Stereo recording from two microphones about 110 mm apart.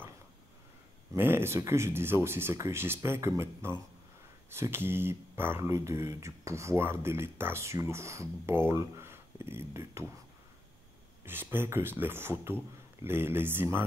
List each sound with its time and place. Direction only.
1.1 s speech: 20° right (ahead or behind)
11.2 s speech: 20° right (ahead or behind)